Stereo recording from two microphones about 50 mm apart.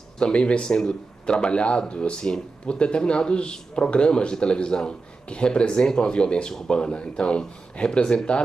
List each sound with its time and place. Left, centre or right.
0.2 s speech: centre